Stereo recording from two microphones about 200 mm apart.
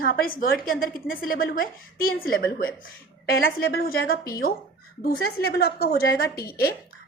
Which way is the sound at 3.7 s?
50° left (ahead or behind).